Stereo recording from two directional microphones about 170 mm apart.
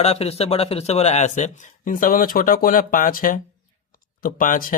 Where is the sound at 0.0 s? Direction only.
35° left (ahead or behind).